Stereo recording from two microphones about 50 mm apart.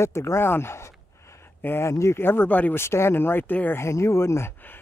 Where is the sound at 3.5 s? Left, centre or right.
Left.